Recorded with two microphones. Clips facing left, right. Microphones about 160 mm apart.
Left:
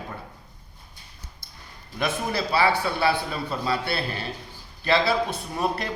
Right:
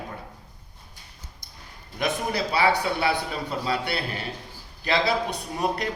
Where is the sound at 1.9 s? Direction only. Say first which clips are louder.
Even; 15° right (ahead or behind).